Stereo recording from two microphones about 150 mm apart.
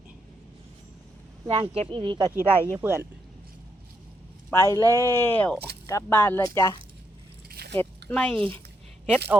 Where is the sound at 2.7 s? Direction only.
15° right (ahead or behind).